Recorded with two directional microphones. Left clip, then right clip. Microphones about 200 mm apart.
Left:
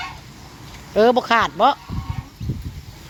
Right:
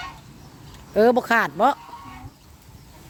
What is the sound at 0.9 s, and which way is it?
Speech, 20° right (ahead or behind).